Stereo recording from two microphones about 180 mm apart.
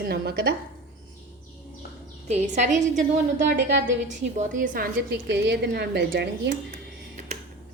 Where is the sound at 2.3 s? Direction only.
40° right (ahead or behind).